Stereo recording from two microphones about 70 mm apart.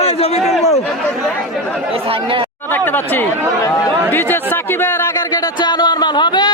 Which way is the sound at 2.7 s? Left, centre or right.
Left.